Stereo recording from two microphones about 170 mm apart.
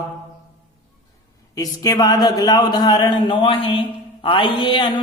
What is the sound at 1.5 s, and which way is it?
Speech, 20° left (ahead or behind).